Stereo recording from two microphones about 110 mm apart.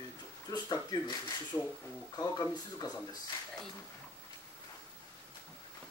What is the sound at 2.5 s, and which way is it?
Speech, 40° left (ahead or behind).